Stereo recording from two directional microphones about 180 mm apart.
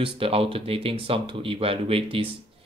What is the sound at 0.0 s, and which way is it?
Speech, 30° right (ahead or behind).